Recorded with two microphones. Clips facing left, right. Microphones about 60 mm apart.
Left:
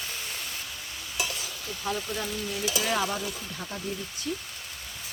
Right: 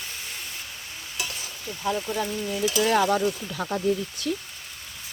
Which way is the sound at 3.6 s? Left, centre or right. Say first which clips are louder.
Right 12 dB; right.